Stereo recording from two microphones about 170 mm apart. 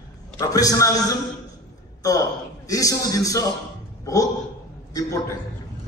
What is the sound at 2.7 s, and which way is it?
Speech, 20° left (ahead or behind).